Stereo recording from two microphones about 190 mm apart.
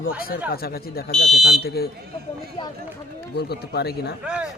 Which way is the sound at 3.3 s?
55° left (ahead or behind).